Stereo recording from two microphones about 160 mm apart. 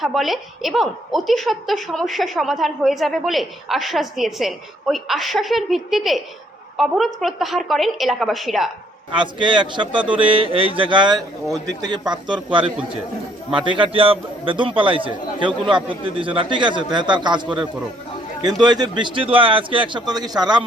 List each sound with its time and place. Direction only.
0.0 s a woman's voice: centre (ahead or behind)
9.1 s a man's voice: 30° right (ahead or behind)
18.6 s a man's voice: 25° right (ahead or behind)